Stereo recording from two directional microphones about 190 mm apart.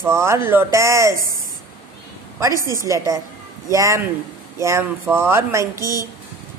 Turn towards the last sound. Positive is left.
turn(degrees=-15)  # may be behind; listen again after turning